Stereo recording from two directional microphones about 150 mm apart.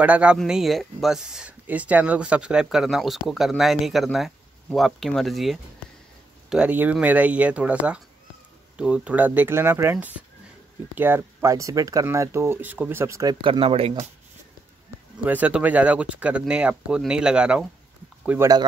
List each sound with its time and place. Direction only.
0.0 s speech: 10° right (ahead or behind); by 13.9 s 40° right (ahead or behind)
15.2 s speech: 10° right (ahead or behind)